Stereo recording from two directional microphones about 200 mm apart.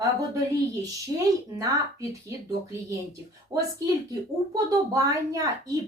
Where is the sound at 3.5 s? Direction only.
15° right (ahead or behind).